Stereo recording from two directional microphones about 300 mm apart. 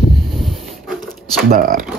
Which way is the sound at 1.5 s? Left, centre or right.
Right.